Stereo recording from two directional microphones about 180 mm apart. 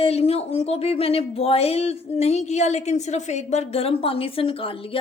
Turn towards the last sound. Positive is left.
turn(degrees=30)  # may be behind; listen again after turning